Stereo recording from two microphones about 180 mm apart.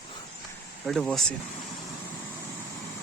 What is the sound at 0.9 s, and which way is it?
Speech, centre (ahead or behind).